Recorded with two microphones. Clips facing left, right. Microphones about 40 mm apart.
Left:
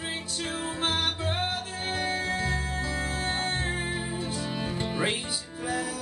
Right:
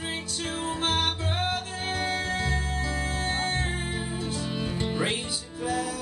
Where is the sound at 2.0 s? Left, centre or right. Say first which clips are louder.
Even; right.